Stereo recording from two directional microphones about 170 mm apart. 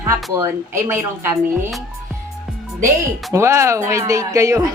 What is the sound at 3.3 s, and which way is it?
Speech, 15° right (ahead or behind).